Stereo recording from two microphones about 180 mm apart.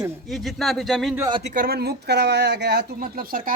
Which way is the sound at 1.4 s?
50° right (ahead or behind).